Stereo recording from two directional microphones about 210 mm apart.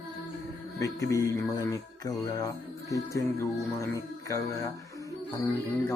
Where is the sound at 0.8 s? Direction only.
15° left (ahead or behind).